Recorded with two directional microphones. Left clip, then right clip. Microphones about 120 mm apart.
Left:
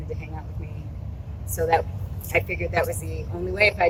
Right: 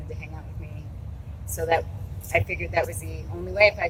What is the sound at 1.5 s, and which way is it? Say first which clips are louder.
Speech: left 2 dB; centre (ahead or behind).